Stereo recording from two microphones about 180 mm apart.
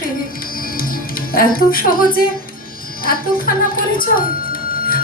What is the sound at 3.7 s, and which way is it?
Speech, 50° left (ahead or behind).